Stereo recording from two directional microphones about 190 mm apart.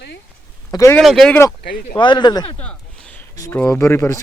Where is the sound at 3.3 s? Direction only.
20° left (ahead or behind).